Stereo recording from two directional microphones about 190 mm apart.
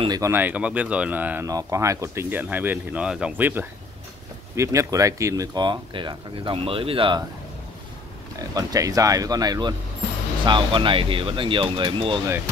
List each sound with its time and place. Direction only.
0.0 s speech: 20° right (ahead or behind)
8.5 s speech: 20° right (ahead or behind)